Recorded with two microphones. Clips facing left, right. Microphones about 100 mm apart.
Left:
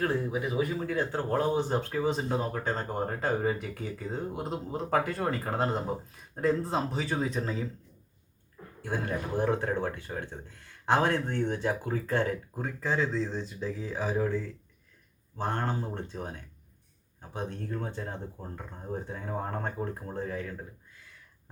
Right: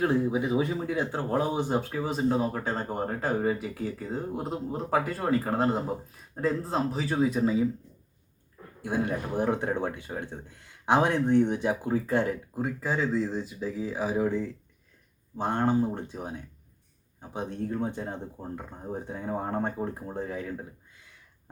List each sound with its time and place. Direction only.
0.0 s speech: 20° right (ahead or behind)
0.9 s speech: 15° right (ahead or behind)
1.9 s speech: centre (ahead or behind)
8.8 s speech: 15° right (ahead or behind)